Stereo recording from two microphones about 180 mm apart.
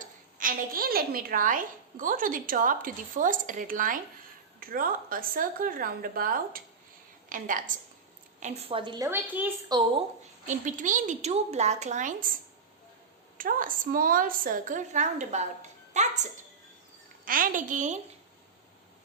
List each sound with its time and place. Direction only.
0.0 s a woman's voice: 50° right (ahead or behind); by 9.0 s 25° right (ahead or behind)
9.0 s a woman's voice: 10° right (ahead or behind)
9.7 s a woman's voice: 20° right (ahead or behind)
10.4 s a woman's voice: 45° right (ahead or behind)
15.9 s music: 40° right (ahead or behind)
17.2 s a woman's voice: 50° right (ahead or behind)